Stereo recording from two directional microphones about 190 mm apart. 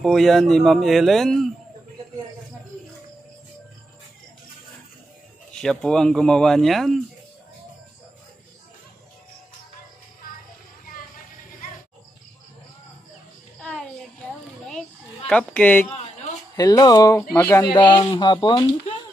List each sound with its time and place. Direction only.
0.0 s speech: centre (ahead or behind)
5.5 s speech: 5° left (ahead or behind)
13.6 s a sound: 5° left (ahead or behind)
16.5 s speech: 20° left (ahead or behind)